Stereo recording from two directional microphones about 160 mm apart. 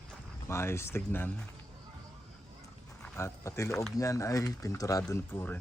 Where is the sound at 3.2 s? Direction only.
15° left (ahead or behind).